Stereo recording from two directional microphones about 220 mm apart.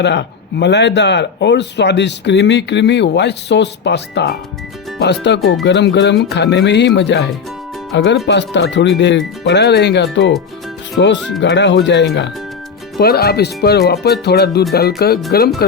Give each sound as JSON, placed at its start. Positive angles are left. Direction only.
{"t": 0.0, "sound": "speech", "side_deg": 50}